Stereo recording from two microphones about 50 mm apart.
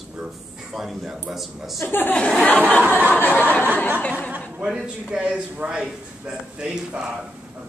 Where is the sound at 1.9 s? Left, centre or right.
Left.